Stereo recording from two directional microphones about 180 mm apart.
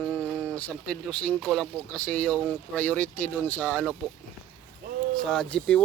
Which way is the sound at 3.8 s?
5° right (ahead or behind).